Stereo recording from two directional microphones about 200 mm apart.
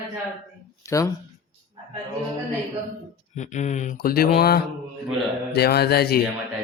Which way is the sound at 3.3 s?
35° left (ahead or behind).